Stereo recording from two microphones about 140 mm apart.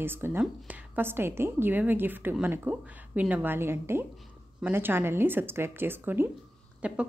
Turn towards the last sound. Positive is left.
turn(degrees=-10)  # may be behind; listen again after turning